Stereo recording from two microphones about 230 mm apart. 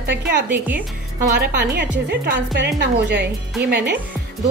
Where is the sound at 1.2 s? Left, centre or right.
Right.